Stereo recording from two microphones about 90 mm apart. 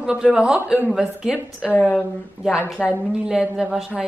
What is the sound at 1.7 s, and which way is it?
Speech, 15° left (ahead or behind).